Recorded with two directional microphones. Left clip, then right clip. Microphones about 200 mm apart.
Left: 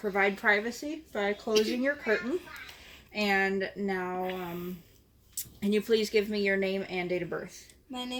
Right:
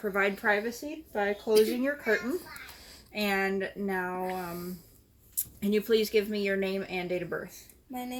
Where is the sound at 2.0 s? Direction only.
5° left (ahead or behind).